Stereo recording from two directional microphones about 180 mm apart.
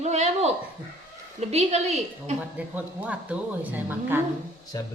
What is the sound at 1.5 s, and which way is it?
Speech, 40° right (ahead or behind).